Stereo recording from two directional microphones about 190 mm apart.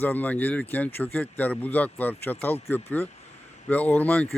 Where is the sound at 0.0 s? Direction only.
10° left (ahead or behind).